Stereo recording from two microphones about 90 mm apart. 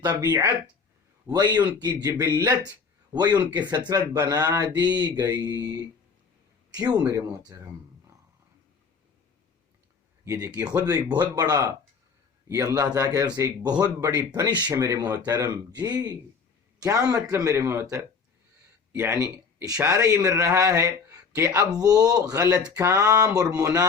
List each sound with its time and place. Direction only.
0.1 s speech: 40° right (ahead or behind)
3.5 s speech: 55° right (ahead or behind)
6.7 s speech: 45° right (ahead or behind)
10.2 s speech: 35° right (ahead or behind)
19.6 s speech: 40° right (ahead or behind)
22.7 s a sound: 30° right (ahead or behind)
23.0 s speech: 40° right (ahead or behind)